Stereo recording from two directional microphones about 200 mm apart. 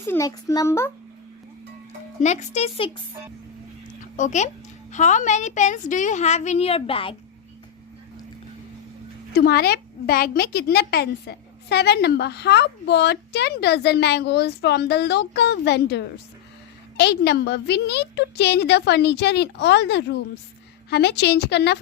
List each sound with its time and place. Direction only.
0.0 s a child's voice: 15° left (ahead or behind)
2.2 s a woman's voice: 35° left (ahead or behind)
4.2 s a woman's voice: 35° left (ahead or behind)
9.3 s a woman's voice: 50° left (ahead or behind)